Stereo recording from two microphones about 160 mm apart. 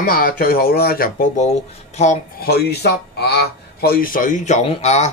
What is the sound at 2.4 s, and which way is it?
Speech, 85° left.